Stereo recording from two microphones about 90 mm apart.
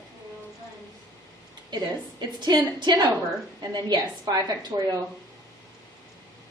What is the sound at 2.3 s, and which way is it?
A woman's voice, 55° right (ahead or behind).